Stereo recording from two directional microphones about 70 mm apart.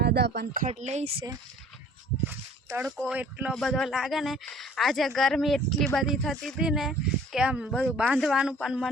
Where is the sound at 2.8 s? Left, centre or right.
Centre.